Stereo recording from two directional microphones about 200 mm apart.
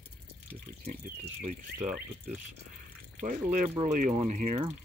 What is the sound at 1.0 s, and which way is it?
Speech, 35° right (ahead or behind).